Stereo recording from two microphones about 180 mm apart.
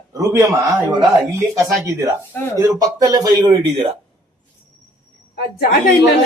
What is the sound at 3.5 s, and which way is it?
Speech, 30° right (ahead or behind).